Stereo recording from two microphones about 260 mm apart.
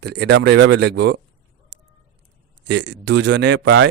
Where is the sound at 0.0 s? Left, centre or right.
Right.